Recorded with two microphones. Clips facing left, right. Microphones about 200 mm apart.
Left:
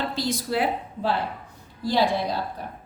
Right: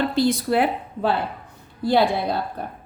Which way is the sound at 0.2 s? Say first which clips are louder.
Right 6 dB; 60° right (ahead or behind).